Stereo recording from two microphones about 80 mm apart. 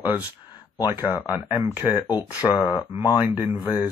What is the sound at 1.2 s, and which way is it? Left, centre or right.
Speech, left.